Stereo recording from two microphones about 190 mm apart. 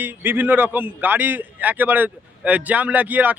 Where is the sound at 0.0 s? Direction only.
10° right (ahead or behind).